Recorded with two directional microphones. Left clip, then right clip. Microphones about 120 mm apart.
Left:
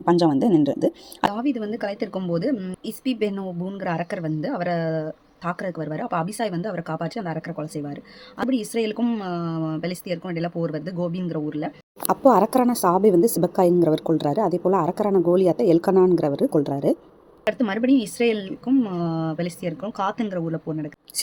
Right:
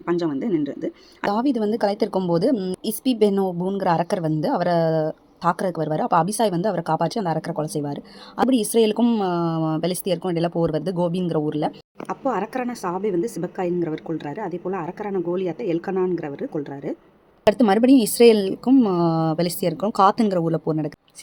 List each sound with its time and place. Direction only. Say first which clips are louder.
0.0 s a woman's voice: left 5 dB; 45° left (ahead or behind)
1.3 s a woman's voice: right 5 dB; 35° right (ahead or behind)
12.0 s a woman's voice: left 8 dB; 30° left (ahead or behind)
17.5 s a woman's voice: right 5 dB; 40° right (ahead or behind)